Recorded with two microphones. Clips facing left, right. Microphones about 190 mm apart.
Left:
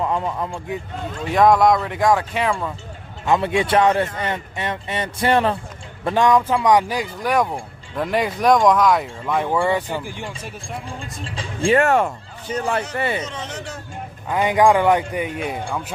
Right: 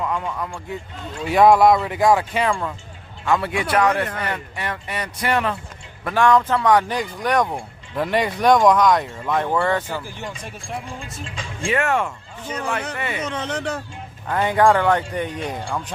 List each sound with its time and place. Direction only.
0.0 s a man's voice: 30° left (ahead or behind)
1.3 s speech: 5° right (ahead or behind)
3.2 s speech: 20° left (ahead or behind)
6.1 s speech: 15° left (ahead or behind); by 9.5 s centre (ahead or behind)
9.5 s speech: 10° left (ahead or behind)
11.2 s speech: 30° left (ahead or behind)
13.2 s speech: 60° right (ahead or behind)
14.3 s speech: 10° left (ahead or behind)